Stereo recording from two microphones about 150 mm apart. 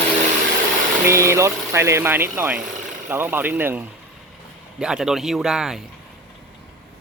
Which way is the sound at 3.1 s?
15° right (ahead or behind).